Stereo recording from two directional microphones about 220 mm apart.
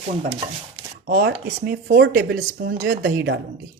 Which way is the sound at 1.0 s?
45° right (ahead or behind).